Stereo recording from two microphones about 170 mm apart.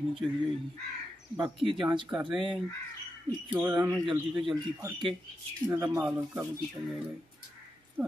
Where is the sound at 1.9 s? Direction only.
20° right (ahead or behind).